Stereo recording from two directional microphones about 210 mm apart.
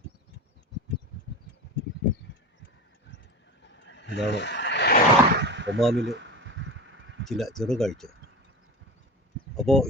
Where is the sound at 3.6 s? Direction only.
60° left (ahead or behind).